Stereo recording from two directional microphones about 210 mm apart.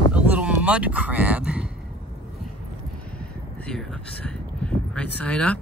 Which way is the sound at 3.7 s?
5° left (ahead or behind).